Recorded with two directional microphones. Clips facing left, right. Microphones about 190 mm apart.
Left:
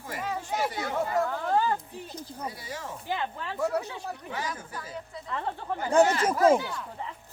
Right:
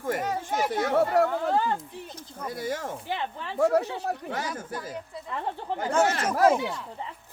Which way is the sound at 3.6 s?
50° right (ahead or behind).